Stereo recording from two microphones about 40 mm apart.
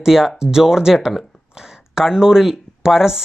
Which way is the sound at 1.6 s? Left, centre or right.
Centre.